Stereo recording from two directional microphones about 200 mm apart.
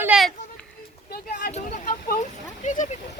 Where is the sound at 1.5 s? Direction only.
40° left (ahead or behind).